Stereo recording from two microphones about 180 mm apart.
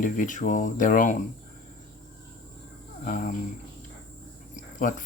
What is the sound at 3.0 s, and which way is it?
Speech, 50° left (ahead or behind).